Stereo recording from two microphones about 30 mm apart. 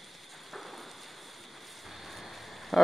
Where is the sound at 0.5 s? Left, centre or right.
Centre.